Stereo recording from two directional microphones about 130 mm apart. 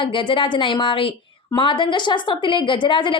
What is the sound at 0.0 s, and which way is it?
A woman's voice, 40° left (ahead or behind).